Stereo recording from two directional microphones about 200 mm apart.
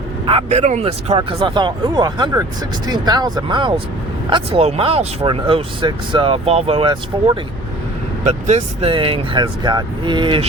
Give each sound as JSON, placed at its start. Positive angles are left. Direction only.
{"t": 0.3, "sound": "speech", "side_deg": -30}
{"t": 8.2, "sound": "speech", "side_deg": -35}